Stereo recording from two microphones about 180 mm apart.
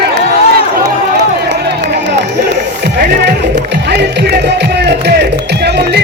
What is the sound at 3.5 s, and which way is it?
Music, 70° right (ahead or behind).